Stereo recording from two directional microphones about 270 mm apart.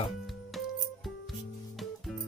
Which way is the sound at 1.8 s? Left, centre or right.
Centre.